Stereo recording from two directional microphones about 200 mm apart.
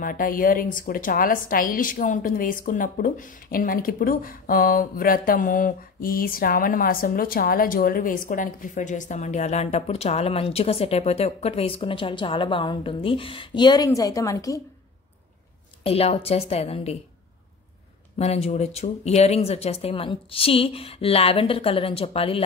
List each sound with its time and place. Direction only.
0.0 s a woman's voice: 45° left (ahead or behind); by 14.6 s 15° left (ahead or behind)
15.8 s speech: 30° left (ahead or behind)
18.1 s speech: 30° left (ahead or behind)